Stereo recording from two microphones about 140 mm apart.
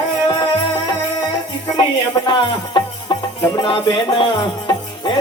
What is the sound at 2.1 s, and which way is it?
Music, 35° left (ahead or behind).